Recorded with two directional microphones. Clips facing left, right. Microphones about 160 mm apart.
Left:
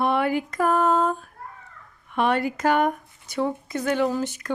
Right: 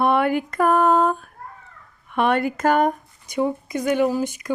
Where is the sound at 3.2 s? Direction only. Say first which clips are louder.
Right 3 dB; 15° right (ahead or behind).